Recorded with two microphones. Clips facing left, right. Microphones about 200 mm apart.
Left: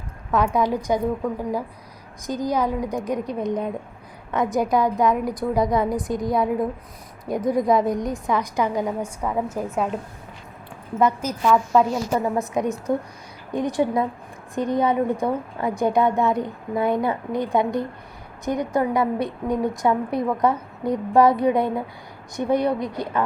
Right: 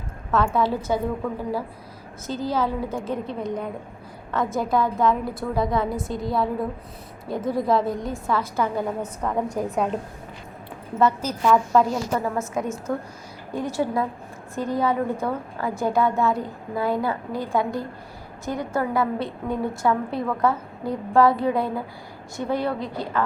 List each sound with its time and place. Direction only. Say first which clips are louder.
0.3 s a woman's voice: left 1 dB; 15° left (ahead or behind)
2.2 s a woman's voice: left 2 dB; 15° left (ahead or behind)
11.4 s a woman's voice: even; centre (ahead or behind)
12.1 s a woman's voice: left 3 dB; 15° left (ahead or behind)